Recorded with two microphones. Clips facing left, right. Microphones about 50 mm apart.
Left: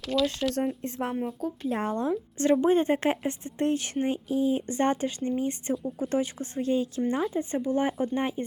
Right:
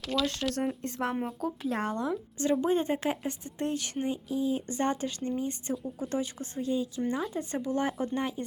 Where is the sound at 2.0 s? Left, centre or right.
Left.